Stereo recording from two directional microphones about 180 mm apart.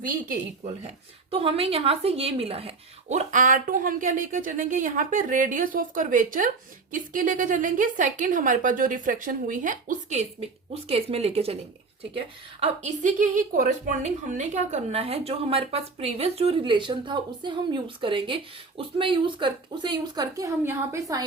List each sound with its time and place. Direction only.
1.3 s speech: 30° right (ahead or behind)
10.7 s a woman's voice: 35° right (ahead or behind); by 21.2 s 15° right (ahead or behind)